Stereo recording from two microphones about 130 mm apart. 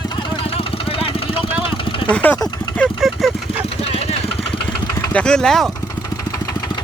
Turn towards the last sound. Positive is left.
turn(degrees=5)  # may be behind; listen again after turning